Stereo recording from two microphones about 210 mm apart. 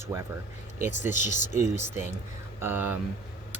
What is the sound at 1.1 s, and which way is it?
Speech, 35° left (ahead or behind).